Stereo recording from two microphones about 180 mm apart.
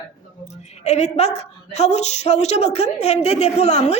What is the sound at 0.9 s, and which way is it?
A woman's voice, 40° left (ahead or behind).